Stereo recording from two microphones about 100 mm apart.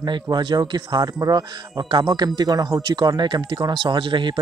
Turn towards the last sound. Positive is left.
turn(degrees=-55)  # may be behind; listen again after turning